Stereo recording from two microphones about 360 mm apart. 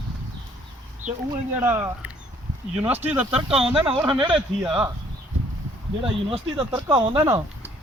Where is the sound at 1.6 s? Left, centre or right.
Centre.